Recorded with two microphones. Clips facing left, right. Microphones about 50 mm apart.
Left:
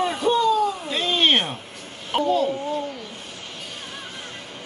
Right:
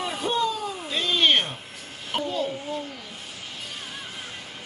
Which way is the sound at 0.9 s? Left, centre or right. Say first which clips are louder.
Right 1 dB; centre.